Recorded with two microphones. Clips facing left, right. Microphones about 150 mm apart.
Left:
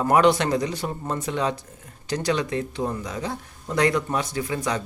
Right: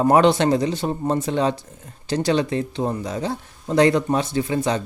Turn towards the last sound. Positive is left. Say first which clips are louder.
# right 5 dB
turn(degrees=-25)  # may be behind; listen again after turning